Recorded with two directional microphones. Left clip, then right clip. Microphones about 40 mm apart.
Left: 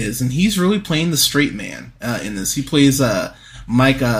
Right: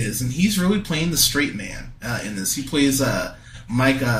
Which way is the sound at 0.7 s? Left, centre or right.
Left.